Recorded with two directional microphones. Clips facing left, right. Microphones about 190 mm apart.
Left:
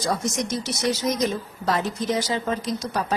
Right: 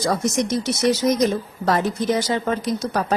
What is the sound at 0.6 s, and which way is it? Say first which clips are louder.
A woman's voice: right 5 dB; 60° right (ahead or behind).